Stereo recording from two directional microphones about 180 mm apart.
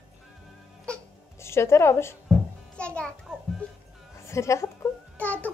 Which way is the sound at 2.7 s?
5° left (ahead or behind).